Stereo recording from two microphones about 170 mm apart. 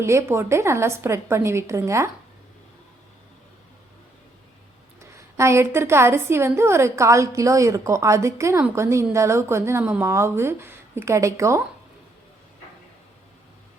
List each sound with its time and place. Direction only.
0.0 s a woman's voice: 15° right (ahead or behind)
4.9 s a woman's voice: 15° right (ahead or behind)